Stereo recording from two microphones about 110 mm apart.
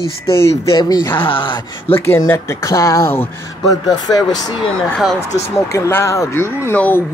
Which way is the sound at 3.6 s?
35° left (ahead or behind).